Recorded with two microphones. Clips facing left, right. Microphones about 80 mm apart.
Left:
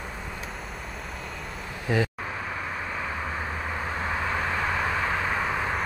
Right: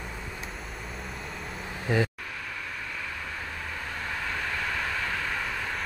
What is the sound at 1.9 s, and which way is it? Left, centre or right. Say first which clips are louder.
Speech: left 1 dB; centre.